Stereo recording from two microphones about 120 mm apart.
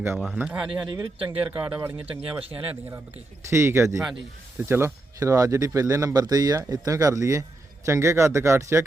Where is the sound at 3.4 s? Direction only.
25° right (ahead or behind).